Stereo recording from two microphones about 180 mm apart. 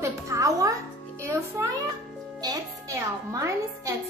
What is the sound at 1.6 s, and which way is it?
A child's voice, 15° right (ahead or behind).